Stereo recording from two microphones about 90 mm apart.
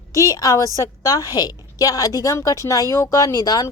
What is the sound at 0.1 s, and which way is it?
A woman's voice, 40° left (ahead or behind).